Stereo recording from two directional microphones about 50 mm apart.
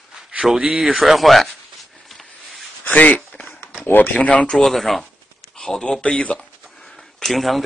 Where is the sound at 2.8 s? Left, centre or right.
Left.